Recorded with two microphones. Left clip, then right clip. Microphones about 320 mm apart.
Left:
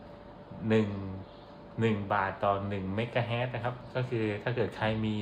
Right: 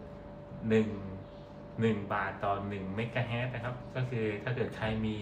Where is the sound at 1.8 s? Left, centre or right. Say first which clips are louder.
Left 3 dB; left.